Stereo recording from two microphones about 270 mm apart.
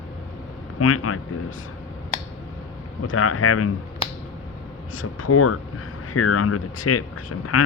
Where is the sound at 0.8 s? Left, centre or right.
Left.